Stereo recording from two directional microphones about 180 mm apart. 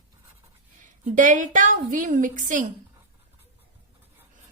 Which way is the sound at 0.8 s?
45° right (ahead or behind).